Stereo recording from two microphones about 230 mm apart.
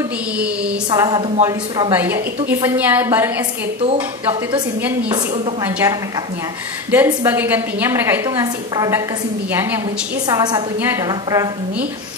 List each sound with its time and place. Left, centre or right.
0.8 s a woman's voice: centre
3.8 s a woman's voice: right
10.2 s a woman's voice: centre